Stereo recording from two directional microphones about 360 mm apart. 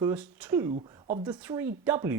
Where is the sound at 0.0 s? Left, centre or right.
Centre.